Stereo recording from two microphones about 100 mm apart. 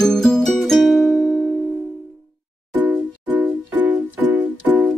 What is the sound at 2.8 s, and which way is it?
Music, 20° right (ahead or behind).